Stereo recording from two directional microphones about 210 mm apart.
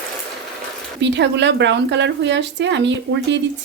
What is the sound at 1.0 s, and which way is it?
A woman's voice, 55° right (ahead or behind).